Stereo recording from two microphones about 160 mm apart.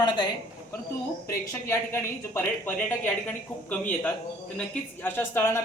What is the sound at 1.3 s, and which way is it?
Speech, 15° left (ahead or behind).